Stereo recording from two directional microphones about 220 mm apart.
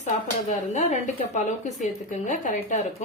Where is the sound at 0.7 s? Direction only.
35° left (ahead or behind).